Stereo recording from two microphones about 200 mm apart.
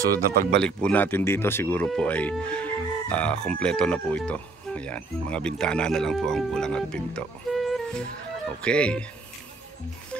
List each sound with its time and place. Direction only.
0.3 s speech: 50° right (ahead or behind)
0.6 s speech: 5° left (ahead or behind)